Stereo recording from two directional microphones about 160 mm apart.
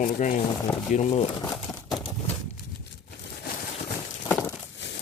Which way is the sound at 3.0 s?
75° left (ahead or behind).